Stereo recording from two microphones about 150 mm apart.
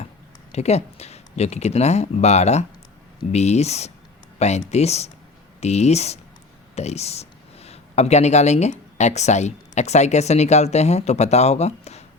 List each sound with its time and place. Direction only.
0.5 s speech: 45° left (ahead or behind)